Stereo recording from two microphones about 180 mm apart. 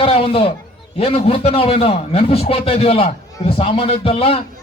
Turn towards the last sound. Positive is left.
turn(degrees=35)  # may be behind; listen again after turning